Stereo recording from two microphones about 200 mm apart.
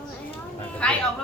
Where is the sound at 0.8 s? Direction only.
5° left (ahead or behind).